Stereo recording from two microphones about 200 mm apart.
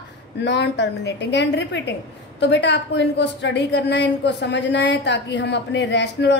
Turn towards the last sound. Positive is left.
turn(degrees=60)  # may be behind; listen again after turning